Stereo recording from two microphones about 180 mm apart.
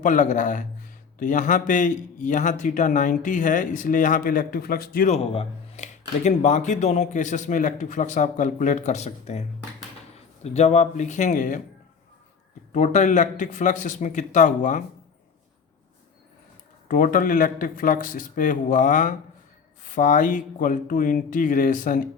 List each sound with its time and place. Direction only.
0.0 s speech: 45° left (ahead or behind)
5.0 s speech: 35° left (ahead or behind)
10.4 s speech: 35° left (ahead or behind)
12.7 s speech: 40° left (ahead or behind)
16.9 s speech: 50° left (ahead or behind)